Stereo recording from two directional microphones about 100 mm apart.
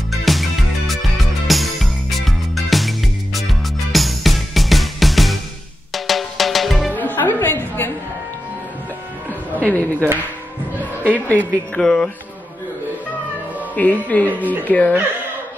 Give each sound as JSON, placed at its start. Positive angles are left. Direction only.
{"t": 0.1, "sound": "music", "side_deg": 0}
{"t": 6.9, "sound": "music", "side_deg": 20}
{"t": 7.3, "sound": "a sound", "side_deg": 20}
{"t": 9.6, "sound": "a sound", "side_deg": 15}
{"t": 11.1, "sound": "speech", "side_deg": 15}
{"t": 13.7, "sound": "speech", "side_deg": 15}
{"t": 14.3, "sound": "speech", "side_deg": -15}
{"t": 14.6, "sound": "speech", "side_deg": 15}